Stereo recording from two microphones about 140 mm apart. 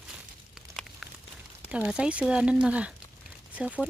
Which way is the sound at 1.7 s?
10° right (ahead or behind).